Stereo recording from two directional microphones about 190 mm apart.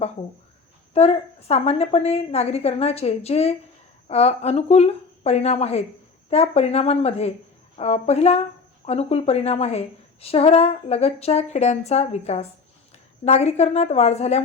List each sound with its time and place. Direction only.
0.9 s a woman's voice: 35° left (ahead or behind)